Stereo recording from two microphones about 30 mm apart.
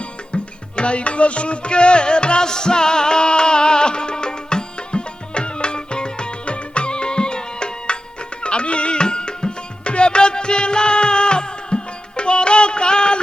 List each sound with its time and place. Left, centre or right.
0.8 s music: left